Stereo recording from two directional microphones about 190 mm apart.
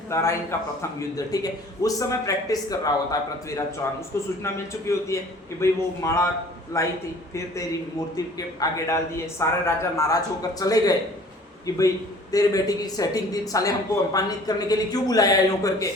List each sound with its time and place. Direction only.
0.1 s a man's voice: 15° left (ahead or behind)
12.3 s speech: 20° left (ahead or behind)